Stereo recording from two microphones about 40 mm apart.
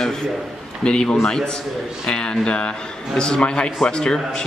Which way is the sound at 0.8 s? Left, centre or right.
Left.